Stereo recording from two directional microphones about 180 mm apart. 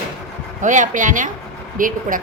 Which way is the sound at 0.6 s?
45° right (ahead or behind).